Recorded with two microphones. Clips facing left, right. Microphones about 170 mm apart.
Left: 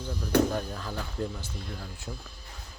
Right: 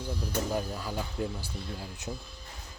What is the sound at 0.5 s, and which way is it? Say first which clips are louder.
Speech: right 1 dB; 10° right (ahead or behind).